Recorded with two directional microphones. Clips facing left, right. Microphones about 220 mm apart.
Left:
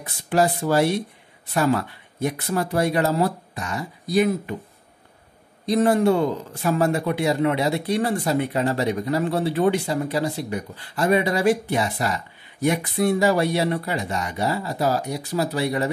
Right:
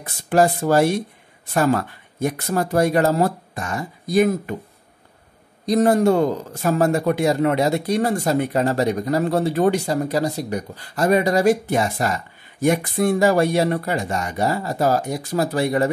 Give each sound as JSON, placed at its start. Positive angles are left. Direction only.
{"t": 0.0, "sound": "speech", "side_deg": -45}
{"t": 5.7, "sound": "speech", "side_deg": -40}